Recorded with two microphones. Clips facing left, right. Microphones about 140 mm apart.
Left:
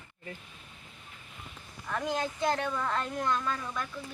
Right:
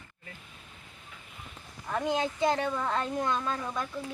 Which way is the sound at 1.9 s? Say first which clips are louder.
Right 3 dB; 20° right (ahead or behind).